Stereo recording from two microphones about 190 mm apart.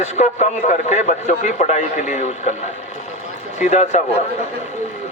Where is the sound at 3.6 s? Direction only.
40° left (ahead or behind).